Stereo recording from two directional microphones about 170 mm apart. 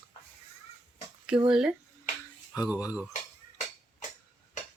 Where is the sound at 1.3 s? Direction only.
5° right (ahead or behind).